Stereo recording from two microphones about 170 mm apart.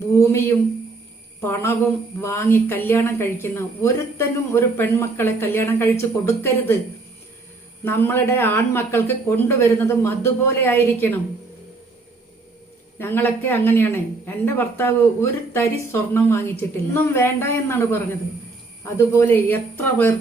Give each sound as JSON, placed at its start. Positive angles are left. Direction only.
{"t": 0.2, "sound": "a woman's voice", "side_deg": 15}
{"t": 7.9, "sound": "speech", "side_deg": 15}
{"t": 13.0, "sound": "speech", "side_deg": 15}